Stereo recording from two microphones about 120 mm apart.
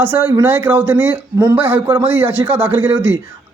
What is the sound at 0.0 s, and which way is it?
A man's voice, 15° right (ahead or behind).